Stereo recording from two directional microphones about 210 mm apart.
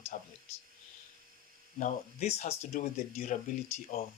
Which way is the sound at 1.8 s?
30° left (ahead or behind).